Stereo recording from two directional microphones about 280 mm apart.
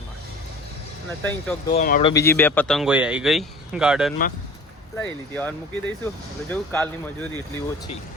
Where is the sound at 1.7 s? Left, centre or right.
Left.